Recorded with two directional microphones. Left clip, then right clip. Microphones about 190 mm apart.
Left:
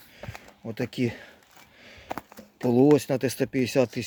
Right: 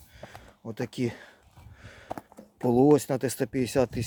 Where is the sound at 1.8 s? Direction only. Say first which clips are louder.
Left 3 dB; 10° right (ahead or behind).